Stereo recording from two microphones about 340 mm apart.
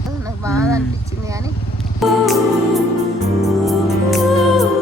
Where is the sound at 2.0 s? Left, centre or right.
Centre.